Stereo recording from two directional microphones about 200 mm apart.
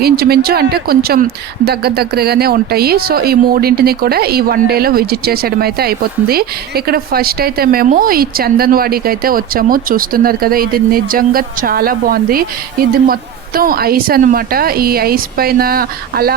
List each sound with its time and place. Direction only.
0.0 s speech: 50° right (ahead or behind)